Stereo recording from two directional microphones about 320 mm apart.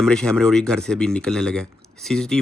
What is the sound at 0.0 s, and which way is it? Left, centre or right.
Speech, centre.